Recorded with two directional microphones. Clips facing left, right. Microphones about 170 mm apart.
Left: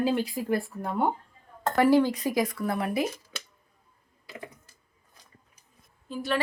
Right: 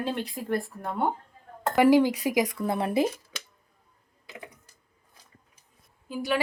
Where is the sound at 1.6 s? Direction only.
15° right (ahead or behind).